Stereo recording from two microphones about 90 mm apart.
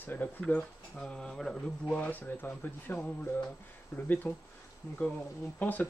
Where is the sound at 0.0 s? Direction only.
20° left (ahead or behind).